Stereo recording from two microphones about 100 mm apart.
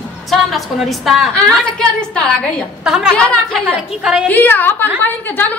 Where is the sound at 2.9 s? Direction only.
5° right (ahead or behind).